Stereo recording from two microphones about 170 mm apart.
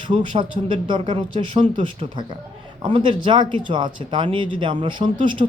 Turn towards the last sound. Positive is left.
turn(degrees=-30)  # may be behind; listen again after turning